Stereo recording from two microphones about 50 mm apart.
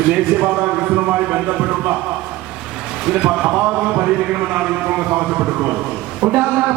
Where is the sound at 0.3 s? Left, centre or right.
Right.